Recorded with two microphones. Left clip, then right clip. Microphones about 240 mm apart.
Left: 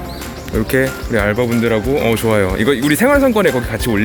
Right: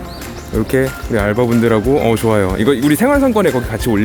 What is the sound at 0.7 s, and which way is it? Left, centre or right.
Speech, centre.